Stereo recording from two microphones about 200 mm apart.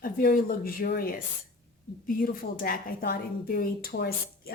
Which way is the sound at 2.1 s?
45° left (ahead or behind).